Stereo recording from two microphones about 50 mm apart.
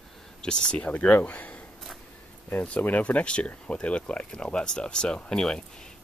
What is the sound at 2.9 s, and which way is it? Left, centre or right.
Speech, left.